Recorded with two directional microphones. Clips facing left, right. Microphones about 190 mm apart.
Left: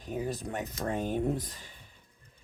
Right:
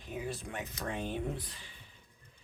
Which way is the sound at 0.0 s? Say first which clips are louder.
Left 5 dB; 40° left (ahead or behind).